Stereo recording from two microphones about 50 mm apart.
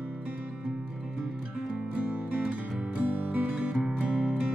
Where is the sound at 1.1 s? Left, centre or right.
Centre.